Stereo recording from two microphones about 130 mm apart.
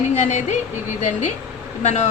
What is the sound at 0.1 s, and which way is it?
Speech, 60° left (ahead or behind).